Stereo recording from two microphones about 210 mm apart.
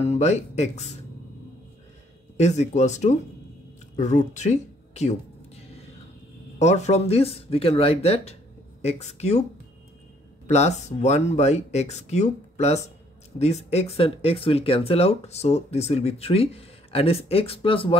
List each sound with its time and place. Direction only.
0.0 s speech: 30° left (ahead or behind)
2.3 s speech: 30° left (ahead or behind)
6.6 s speech: 30° left (ahead or behind)
10.4 s speech: 30° left (ahead or behind)